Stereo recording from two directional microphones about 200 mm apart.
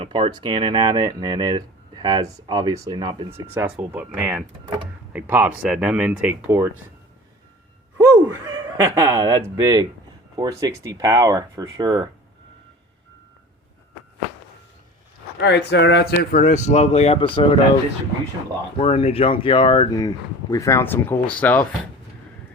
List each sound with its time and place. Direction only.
0.0 s speech: 25° right (ahead or behind)
3.2 s speech: 10° right (ahead or behind)
7.9 s speech: 15° right (ahead or behind)
15.4 s speech: 60° left (ahead or behind); by 17.4 s 25° left (ahead or behind)
18.8 s speech: 30° left (ahead or behind); by 21.7 s 10° left (ahead or behind)